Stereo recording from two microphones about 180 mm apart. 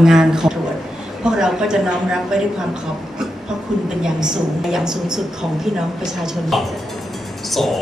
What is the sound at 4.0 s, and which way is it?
Speech, 5° right (ahead or behind).